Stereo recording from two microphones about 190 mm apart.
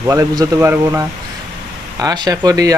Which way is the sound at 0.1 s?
15° right (ahead or behind).